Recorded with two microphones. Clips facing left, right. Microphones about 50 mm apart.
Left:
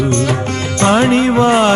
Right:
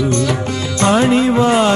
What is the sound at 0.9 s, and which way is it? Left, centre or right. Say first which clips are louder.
Music: left 1 dB; left.